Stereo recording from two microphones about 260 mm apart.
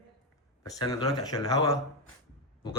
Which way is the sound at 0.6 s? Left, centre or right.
Centre.